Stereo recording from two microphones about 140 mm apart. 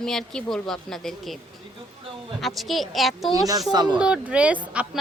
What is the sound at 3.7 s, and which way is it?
Speech, 30° right (ahead or behind).